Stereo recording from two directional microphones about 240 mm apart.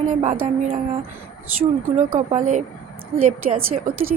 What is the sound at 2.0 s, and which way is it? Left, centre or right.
Speech, right.